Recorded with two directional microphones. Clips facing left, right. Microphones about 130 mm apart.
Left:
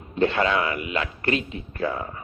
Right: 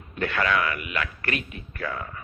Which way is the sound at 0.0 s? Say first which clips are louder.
Left 5 dB; 25° left (ahead or behind).